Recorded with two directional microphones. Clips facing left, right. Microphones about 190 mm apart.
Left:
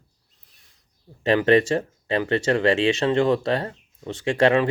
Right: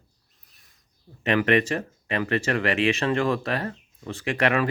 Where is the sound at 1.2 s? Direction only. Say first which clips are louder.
Left 4 dB; 30° left (ahead or behind).